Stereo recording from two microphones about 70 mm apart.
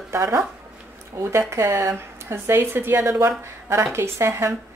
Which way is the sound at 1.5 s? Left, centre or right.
Right.